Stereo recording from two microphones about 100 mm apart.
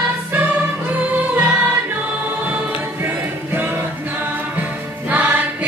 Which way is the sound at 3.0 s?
20° right (ahead or behind).